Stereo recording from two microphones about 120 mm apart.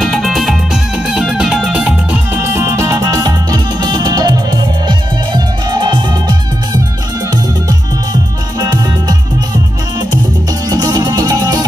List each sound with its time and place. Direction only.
0.0 s music: centre (ahead or behind); by 6.8 s 40° right (ahead or behind)
8.1 s music: 35° right (ahead or behind)
10.7 s music: 35° right (ahead or behind)